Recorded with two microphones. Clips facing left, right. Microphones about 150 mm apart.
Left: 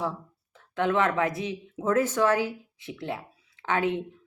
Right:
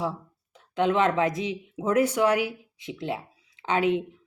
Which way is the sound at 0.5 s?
20° right (ahead or behind).